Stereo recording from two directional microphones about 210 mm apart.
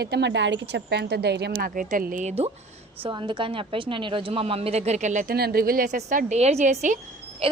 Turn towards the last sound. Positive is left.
turn(degrees=-25)  # may be behind; listen again after turning